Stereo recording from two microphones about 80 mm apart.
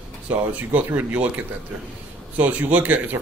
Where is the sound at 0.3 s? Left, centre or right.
Centre.